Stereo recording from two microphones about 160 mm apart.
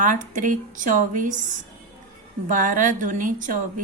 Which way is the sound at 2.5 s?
55° right (ahead or behind).